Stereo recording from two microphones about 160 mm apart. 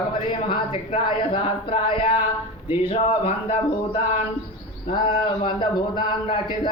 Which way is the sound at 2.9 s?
35° left (ahead or behind).